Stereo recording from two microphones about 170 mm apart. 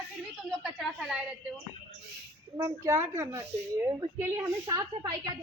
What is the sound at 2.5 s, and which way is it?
A woman's voice, 15° right (ahead or behind).